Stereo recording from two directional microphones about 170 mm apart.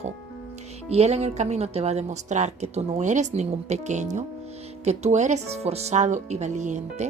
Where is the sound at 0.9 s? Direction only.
40° right (ahead or behind).